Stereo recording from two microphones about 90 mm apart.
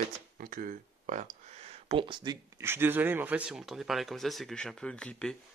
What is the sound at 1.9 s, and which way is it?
Speech, 65° right (ahead or behind).